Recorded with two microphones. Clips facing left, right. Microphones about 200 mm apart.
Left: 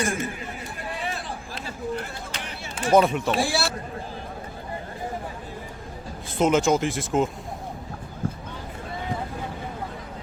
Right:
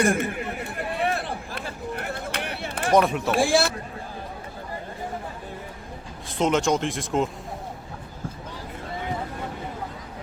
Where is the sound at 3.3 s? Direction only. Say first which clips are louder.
Right 4 dB; 50° right (ahead or behind).